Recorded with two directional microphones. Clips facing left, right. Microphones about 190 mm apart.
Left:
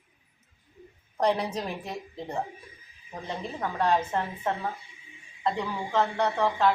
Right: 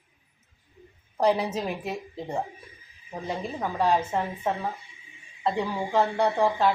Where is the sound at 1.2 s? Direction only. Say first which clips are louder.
Right 2 dB; 5° right (ahead or behind).